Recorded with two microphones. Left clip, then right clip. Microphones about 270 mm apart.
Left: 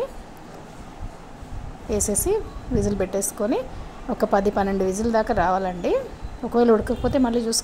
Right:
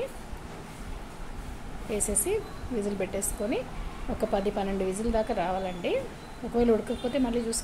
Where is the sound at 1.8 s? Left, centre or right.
Left.